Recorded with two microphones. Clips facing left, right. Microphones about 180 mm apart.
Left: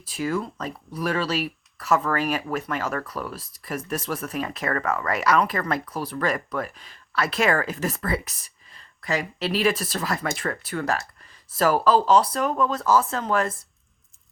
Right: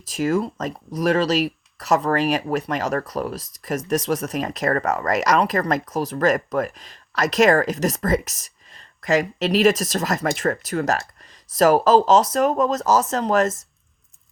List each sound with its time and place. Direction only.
0.2 s speech: 40° right (ahead or behind)